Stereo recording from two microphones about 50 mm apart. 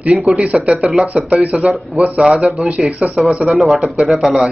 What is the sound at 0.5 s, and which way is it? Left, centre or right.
Speech, right.